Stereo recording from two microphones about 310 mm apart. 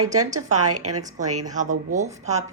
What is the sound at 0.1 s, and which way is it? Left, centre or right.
Speech, right.